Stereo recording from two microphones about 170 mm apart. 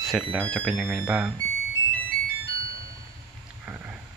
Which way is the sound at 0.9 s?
5° right (ahead or behind).